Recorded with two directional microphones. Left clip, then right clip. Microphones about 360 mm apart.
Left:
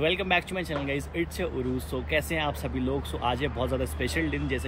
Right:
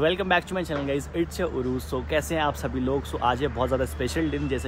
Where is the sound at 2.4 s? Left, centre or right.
Centre.